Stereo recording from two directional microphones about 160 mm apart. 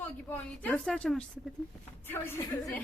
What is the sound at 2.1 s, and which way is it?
Speech, 15° left (ahead or behind).